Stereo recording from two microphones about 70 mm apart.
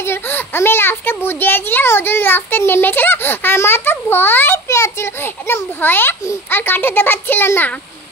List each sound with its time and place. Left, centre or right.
0.0 s a child's voice: left
4.6 s a child's voice: left